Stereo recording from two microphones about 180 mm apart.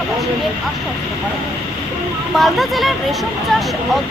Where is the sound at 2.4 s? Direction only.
Centre (ahead or behind).